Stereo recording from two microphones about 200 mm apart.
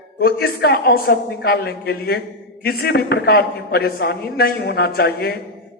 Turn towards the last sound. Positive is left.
turn(degrees=55)  # may be behind; listen again after turning